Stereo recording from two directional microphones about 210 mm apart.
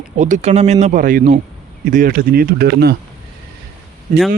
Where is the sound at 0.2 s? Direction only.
35° right (ahead or behind).